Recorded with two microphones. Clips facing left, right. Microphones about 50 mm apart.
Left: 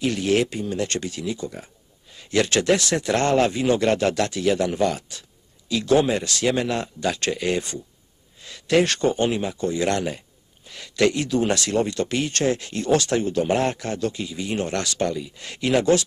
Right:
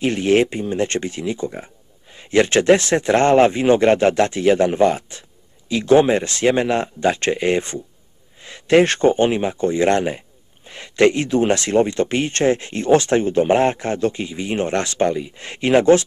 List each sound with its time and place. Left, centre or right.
0.0 s speech: right